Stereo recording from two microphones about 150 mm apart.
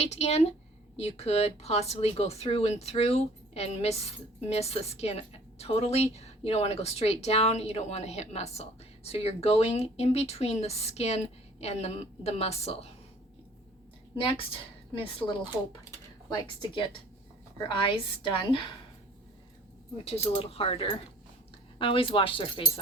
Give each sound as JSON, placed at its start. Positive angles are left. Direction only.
{"t": 0.0, "sound": "speech", "side_deg": 45}
{"t": 14.3, "sound": "a woman's voice", "side_deg": 35}
{"t": 20.1, "sound": "a woman's voice", "side_deg": 40}